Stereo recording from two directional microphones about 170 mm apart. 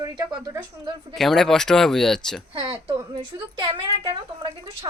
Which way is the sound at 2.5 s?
30° right (ahead or behind).